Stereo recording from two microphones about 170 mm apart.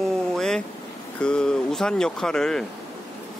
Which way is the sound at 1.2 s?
5° left (ahead or behind).